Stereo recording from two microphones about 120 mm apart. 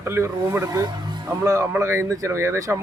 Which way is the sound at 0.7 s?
35° right (ahead or behind).